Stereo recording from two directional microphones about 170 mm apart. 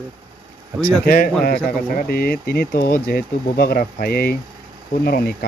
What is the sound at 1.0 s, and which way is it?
Speech, 60° left (ahead or behind).